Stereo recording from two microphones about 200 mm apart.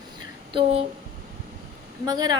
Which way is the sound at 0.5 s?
30° right (ahead or behind).